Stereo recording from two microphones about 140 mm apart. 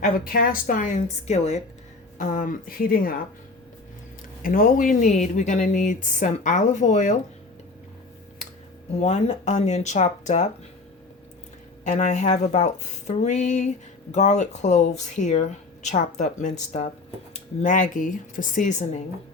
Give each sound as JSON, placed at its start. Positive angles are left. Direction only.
{"t": 0.0, "sound": "a woman's voice", "side_deg": 90}
{"t": 2.1, "sound": "a woman's voice", "side_deg": 65}
{"t": 4.4, "sound": "speech", "side_deg": 90}
{"t": 9.0, "sound": "speech", "side_deg": 50}
{"t": 11.9, "sound": "speech", "side_deg": 60}